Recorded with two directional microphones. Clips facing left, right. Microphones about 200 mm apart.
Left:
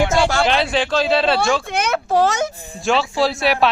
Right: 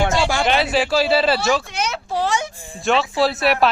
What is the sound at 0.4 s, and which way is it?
A man's voice, 5° right (ahead or behind).